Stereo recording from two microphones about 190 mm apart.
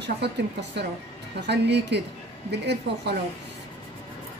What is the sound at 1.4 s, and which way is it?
A woman's voice, 65° right (ahead or behind).